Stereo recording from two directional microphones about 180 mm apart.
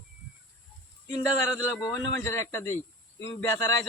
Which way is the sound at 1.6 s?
15° left (ahead or behind).